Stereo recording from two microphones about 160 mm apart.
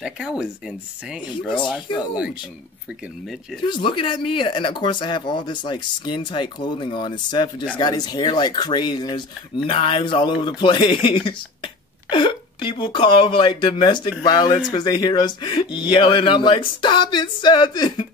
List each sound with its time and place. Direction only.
0.0 s speech: 5° right (ahead or behind)
3.6 s speech: 30° left (ahead or behind)